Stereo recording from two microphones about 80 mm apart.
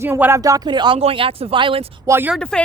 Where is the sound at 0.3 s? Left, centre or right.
Right.